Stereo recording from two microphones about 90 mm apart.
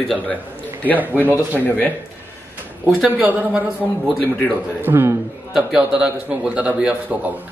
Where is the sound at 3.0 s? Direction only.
15° right (ahead or behind).